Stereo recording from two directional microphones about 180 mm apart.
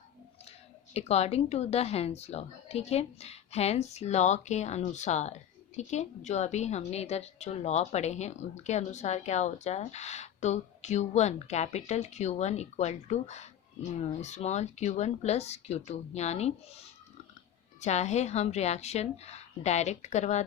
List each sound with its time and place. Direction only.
0.9 s a woman's voice: 35° left (ahead or behind)